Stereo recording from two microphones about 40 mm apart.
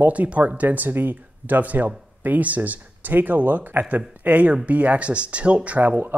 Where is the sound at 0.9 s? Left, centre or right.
Right.